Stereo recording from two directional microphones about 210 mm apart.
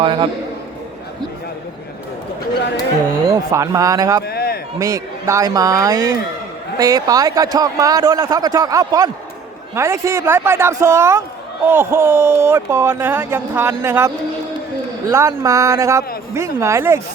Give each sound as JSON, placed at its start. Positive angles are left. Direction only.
{"t": 0.0, "sound": "a man's voice", "side_deg": -20}
{"t": 3.2, "sound": "speech", "side_deg": -15}
{"t": 4.3, "sound": "a sound", "side_deg": 45}
{"t": 4.8, "sound": "speech", "side_deg": -15}
{"t": 15.1, "sound": "speech", "side_deg": -15}